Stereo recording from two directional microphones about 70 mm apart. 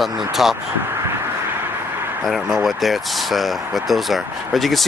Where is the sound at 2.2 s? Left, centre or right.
Centre.